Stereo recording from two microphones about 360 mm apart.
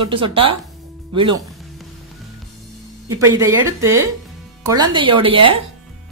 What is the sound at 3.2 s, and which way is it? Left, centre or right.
Speech, centre.